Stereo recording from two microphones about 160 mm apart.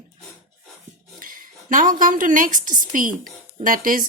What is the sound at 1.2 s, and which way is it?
A woman's voice, 60° right (ahead or behind).